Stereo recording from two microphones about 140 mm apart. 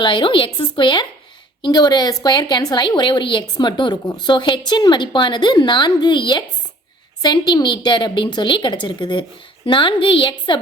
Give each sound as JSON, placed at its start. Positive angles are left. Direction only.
{"t": 0.0, "sound": "a woman's voice", "side_deg": 35}